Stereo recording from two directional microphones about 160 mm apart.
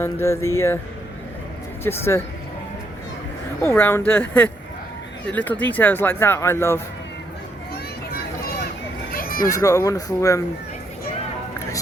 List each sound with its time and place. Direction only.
0.0 s speech: 15° left (ahead or behind)
1.8 s speech: 15° left (ahead or behind)
3.6 s speech: 15° left (ahead or behind)
9.1 s a sound: 65° left (ahead or behind)
9.5 s speech: 20° left (ahead or behind)